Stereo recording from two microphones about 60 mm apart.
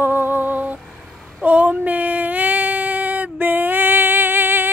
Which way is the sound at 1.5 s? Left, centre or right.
Right.